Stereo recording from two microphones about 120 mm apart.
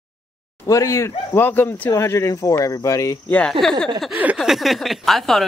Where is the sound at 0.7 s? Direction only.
25° left (ahead or behind).